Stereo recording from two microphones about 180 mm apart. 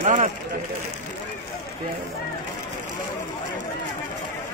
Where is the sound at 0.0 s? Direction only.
45° right (ahead or behind).